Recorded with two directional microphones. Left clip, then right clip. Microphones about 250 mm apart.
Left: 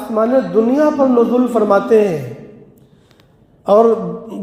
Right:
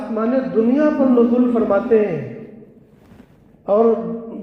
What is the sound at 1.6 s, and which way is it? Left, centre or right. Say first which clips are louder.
Speech: left 5 dB; left.